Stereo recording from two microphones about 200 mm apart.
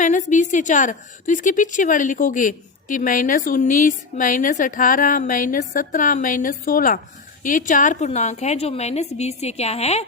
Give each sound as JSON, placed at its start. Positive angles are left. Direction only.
{"t": 0.0, "sound": "a woman's voice", "side_deg": 40}